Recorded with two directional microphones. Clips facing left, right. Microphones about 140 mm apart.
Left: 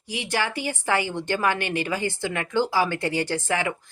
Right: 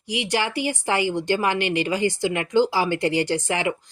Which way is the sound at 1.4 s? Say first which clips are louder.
Right 2 dB; 50° left (ahead or behind).